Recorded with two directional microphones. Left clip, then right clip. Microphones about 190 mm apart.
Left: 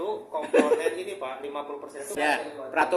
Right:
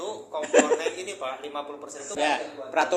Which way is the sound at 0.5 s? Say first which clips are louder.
Right 1 dB; 20° right (ahead or behind).